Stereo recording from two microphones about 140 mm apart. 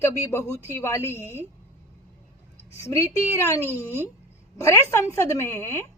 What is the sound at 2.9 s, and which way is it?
Speech, 20° left (ahead or behind).